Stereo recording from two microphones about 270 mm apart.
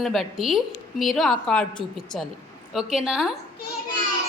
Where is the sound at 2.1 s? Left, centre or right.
Centre.